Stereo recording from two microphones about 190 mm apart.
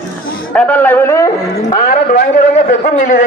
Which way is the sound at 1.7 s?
50° left (ahead or behind).